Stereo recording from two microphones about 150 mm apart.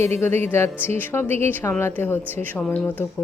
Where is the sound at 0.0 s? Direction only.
15° left (ahead or behind).